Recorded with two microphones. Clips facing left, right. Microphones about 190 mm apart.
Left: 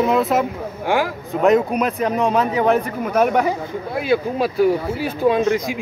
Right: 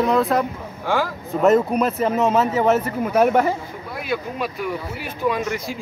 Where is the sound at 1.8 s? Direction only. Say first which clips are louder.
Even; centre (ahead or behind).